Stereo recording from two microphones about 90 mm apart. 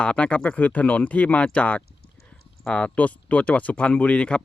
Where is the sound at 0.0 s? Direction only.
10° left (ahead or behind).